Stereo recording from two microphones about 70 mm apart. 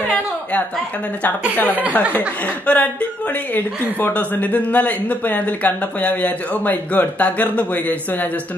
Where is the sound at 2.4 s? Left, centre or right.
Left.